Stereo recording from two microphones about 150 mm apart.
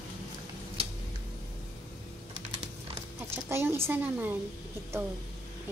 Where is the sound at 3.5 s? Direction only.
15° right (ahead or behind).